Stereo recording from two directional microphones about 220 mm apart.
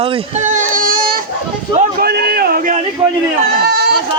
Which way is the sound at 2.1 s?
45° right (ahead or behind).